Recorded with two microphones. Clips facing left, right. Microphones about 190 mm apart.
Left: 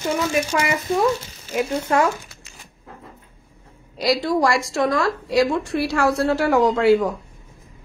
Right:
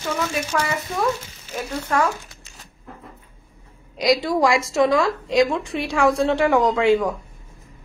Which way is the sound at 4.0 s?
Centre (ahead or behind).